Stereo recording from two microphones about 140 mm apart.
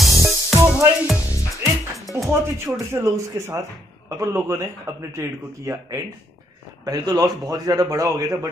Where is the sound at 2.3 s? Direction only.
20° right (ahead or behind).